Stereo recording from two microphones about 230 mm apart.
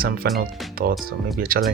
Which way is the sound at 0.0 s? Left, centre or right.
Right.